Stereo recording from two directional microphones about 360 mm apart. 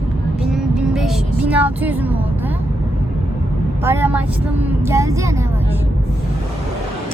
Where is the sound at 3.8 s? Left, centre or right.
Centre.